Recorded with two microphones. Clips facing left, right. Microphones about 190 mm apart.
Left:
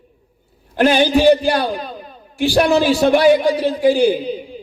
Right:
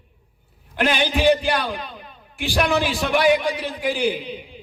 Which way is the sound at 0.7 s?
35° left (ahead or behind).